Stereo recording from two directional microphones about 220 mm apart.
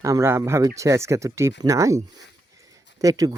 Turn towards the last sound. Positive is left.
turn(degrees=-15)  # may be behind; listen again after turning